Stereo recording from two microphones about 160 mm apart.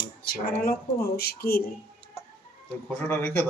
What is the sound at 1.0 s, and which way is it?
Speech, 75° left (ahead or behind).